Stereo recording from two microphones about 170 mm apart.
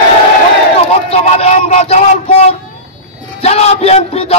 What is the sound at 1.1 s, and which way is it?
A man's voice, 35° left (ahead or behind).